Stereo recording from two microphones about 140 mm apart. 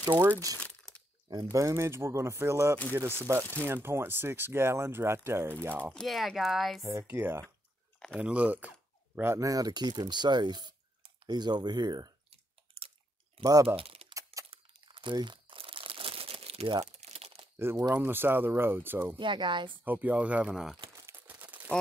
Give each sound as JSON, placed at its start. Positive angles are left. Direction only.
{"t": 0.1, "sound": "speech", "side_deg": -10}
{"t": 0.6, "sound": "crumpling", "side_deg": 10}
{"t": 1.3, "sound": "speech", "side_deg": -25}
{"t": 5.9, "sound": "speech", "side_deg": 0}
{"t": 6.9, "sound": "speech", "side_deg": -15}
{"t": 12.3, "sound": "chewing", "side_deg": -45}
{"t": 13.4, "sound": "speech", "side_deg": -20}
{"t": 13.7, "sound": "a sound", "side_deg": -40}
{"t": 14.5, "sound": "crumpling", "side_deg": -35}
{"t": 16.8, "sound": "crumpling", "side_deg": -50}
{"t": 17.6, "sound": "speech", "side_deg": -20}
{"t": 19.1, "sound": "speech", "side_deg": -35}
{"t": 19.8, "sound": "speech", "side_deg": -10}
{"t": 20.9, "sound": "crumpling", "side_deg": -20}